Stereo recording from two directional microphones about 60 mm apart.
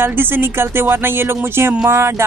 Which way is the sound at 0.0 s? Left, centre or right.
Right.